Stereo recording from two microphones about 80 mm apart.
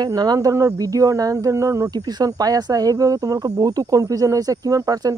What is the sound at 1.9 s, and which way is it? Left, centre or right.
Speech, right.